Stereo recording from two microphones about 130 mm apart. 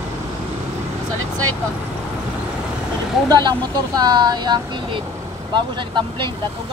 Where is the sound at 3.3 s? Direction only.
30° right (ahead or behind).